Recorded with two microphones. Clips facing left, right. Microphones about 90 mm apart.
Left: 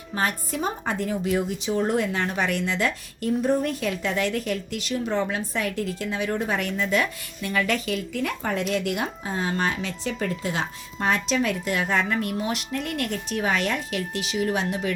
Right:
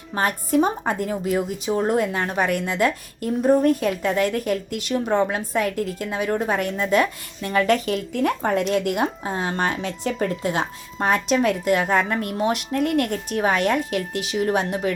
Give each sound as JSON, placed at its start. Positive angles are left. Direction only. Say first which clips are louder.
{"t": 0.1, "sound": "a woman's voice", "louder": "right 5 dB", "side_deg": -45}
{"t": 14.3, "sound": "a woman's voice", "louder": "right 3 dB", "side_deg": -40}